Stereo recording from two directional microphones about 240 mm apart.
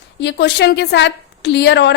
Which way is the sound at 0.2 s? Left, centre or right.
Left.